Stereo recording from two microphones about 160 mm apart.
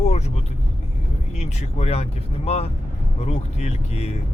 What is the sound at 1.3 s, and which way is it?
Speech, 45° left (ahead or behind).